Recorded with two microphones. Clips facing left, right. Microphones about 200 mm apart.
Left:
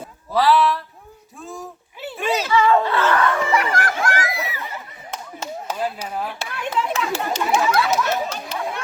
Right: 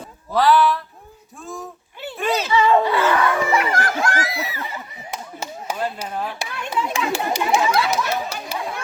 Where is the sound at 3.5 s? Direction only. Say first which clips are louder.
Right 1 dB; 25° right (ahead or behind).